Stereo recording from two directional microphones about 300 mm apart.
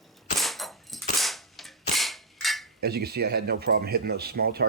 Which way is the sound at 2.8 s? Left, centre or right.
Right.